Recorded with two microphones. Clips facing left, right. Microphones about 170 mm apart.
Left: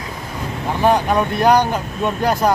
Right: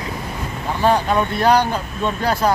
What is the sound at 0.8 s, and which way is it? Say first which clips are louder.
Speech: left 1 dB; 15° left (ahead or behind).